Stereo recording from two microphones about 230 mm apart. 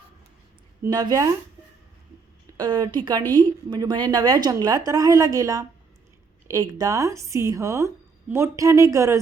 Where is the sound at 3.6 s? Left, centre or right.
Centre.